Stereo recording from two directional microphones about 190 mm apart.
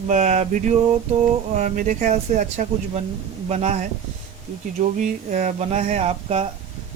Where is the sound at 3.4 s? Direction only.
40° right (ahead or behind).